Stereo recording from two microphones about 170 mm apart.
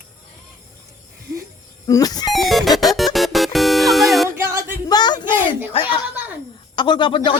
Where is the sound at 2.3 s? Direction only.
Centre (ahead or behind).